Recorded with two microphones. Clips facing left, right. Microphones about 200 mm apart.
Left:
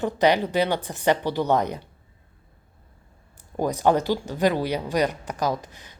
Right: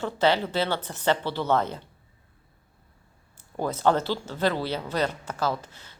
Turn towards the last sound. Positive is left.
turn(degrees=15)  # may be behind; listen again after turning